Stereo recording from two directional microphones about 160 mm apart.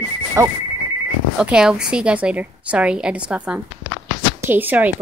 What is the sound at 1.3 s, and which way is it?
Speech, 5° right (ahead or behind).